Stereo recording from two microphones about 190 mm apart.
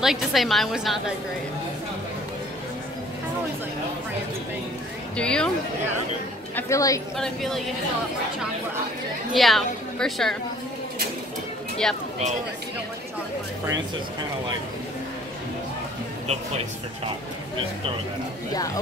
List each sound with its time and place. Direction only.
0.0 s a woman's voice: centre (ahead or behind)
5.1 s a woman's voice: 5° left (ahead or behind)
6.5 s a woman's voice: 15° left (ahead or behind)
7.2 s a woman's voice: centre (ahead or behind)
9.3 s a woman's voice: centre (ahead or behind)
11.8 s a woman's voice: 5° left (ahead or behind)